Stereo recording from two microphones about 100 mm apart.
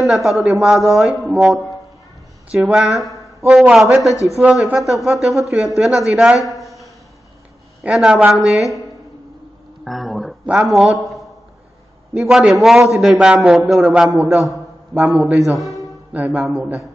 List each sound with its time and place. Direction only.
0.0 s speech: 5° right (ahead or behind)
4.1 s speech: 30° left (ahead or behind)
4.4 s speech: 5° right (ahead or behind)
6.4 s a sound: centre (ahead or behind)
7.8 s speech: 10° right (ahead or behind)
9.8 s a sound: centre (ahead or behind)
10.4 s a man's voice: 5° right (ahead or behind)
16.5 s speech: 15° right (ahead or behind)